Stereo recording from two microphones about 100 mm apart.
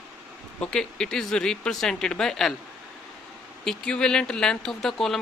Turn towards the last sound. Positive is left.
turn(degrees=5)  # may be behind; listen again after turning